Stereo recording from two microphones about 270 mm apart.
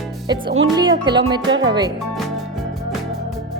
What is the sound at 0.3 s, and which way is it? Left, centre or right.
Speech, centre.